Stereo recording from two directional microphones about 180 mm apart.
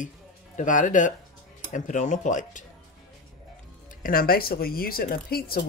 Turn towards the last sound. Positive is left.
turn(degrees=55)  # may be behind; listen again after turning